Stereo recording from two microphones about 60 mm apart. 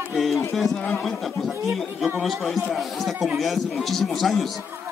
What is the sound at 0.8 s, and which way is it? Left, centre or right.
Speech, left.